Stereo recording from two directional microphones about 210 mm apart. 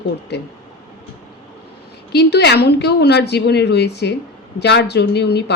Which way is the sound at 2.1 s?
55° left (ahead or behind).